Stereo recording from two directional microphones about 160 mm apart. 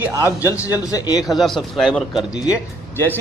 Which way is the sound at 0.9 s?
25° left (ahead or behind).